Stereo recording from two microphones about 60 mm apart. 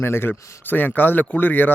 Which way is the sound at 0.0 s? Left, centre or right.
Left.